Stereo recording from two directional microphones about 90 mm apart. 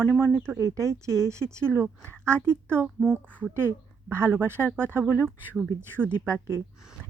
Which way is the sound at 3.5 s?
30° right (ahead or behind).